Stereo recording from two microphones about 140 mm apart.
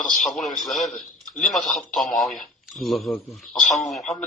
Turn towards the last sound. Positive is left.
turn(degrees=0)  # may be behind; listen again after turning